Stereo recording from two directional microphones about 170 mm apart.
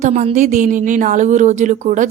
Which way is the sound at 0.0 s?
40° right (ahead or behind).